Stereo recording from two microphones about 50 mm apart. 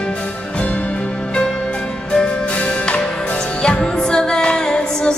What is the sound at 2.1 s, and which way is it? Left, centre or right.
Music, left.